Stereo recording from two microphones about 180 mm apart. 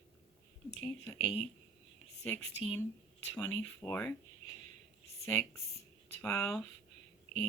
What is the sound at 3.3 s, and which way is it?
Speech, 10° left (ahead or behind).